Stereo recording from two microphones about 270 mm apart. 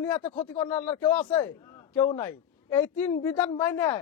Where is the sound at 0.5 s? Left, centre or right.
Centre.